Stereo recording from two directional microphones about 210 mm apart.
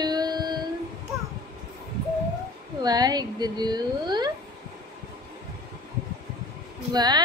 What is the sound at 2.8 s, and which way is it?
A woman's voice, 20° right (ahead or behind).